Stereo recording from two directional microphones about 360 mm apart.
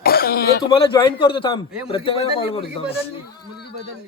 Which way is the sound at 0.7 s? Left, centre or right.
Centre.